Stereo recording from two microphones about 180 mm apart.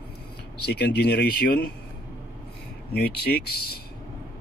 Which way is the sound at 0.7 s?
70° left (ahead or behind).